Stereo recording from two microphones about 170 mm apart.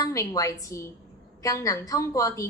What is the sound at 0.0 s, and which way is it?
A woman's voice, 20° left (ahead or behind).